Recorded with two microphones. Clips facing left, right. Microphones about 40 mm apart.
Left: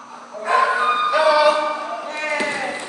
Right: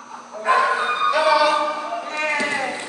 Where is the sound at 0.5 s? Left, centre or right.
Centre.